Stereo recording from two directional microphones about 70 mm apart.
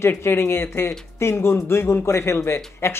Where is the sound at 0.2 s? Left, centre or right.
Left.